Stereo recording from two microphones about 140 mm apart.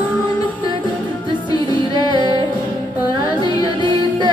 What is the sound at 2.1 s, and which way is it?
Music, 35° right (ahead or behind).